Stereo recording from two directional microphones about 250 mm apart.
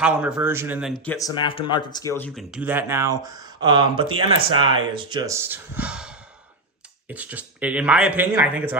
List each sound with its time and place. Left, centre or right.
0.0 s speech: centre
1.0 s speech: centre